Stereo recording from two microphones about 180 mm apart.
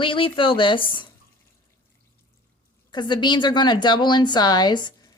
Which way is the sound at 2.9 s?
25° left (ahead or behind).